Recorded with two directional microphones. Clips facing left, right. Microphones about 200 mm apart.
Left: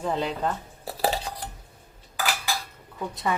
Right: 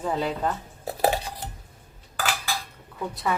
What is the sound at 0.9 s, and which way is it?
Cutlery, 50° right (ahead or behind).